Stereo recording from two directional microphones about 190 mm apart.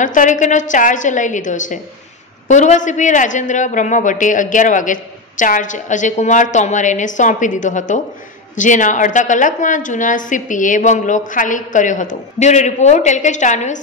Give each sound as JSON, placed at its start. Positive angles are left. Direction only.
{"t": 0.0, "sound": "a man's voice", "side_deg": 40}